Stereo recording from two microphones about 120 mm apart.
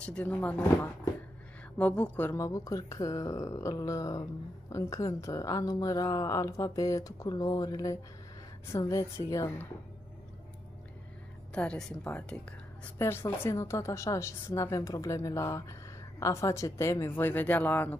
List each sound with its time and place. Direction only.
0.0 s a woman's voice: 10° left (ahead or behind)
1.8 s a woman's voice: 10° left (ahead or behind)
2.4 s speech: 30° left (ahead or behind)
11.5 s a woman's voice: 10° left (ahead or behind)
13.0 s speech: 20° left (ahead or behind)